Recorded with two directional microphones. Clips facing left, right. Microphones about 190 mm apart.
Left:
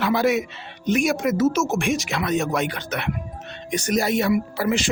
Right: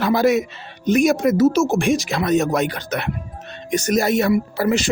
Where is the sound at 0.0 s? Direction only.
40° right (ahead or behind).